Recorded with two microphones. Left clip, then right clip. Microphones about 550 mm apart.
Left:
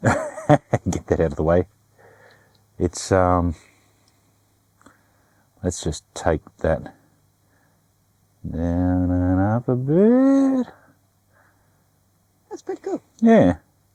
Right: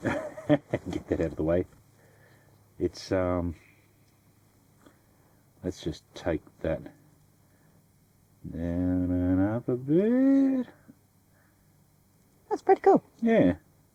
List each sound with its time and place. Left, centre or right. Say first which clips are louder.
0.0 s dog: left 10 dB; left
2.7 s speech: left 9 dB; left
5.6 s speech: left 8 dB; left
8.5 s speech: left 7 dB; left
12.5 s speech: right 8 dB; right
13.2 s speech: left 10 dB; left